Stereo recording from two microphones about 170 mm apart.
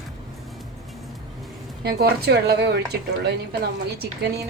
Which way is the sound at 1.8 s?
70° right (ahead or behind).